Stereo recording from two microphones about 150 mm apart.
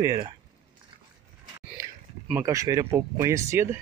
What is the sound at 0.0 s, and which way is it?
Speech, 20° right (ahead or behind).